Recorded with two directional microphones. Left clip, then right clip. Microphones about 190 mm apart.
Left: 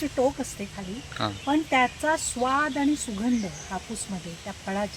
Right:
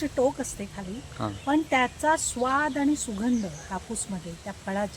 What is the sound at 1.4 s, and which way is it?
Speech, 10° right (ahead or behind).